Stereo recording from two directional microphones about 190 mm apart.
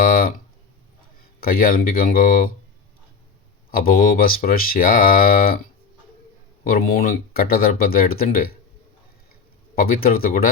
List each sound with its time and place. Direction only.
0.0 s guitar: 50° left (ahead or behind)
1.4 s speech: 50° left (ahead or behind)
3.7 s speech: 50° left (ahead or behind)
6.7 s speech: 50° left (ahead or behind)
9.7 s speech: 50° left (ahead or behind)